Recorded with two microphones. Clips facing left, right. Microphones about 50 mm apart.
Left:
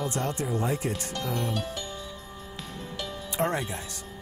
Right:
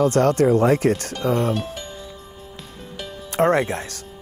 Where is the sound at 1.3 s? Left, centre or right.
Right.